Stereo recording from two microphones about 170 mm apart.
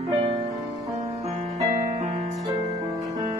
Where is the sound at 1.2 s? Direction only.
40° right (ahead or behind).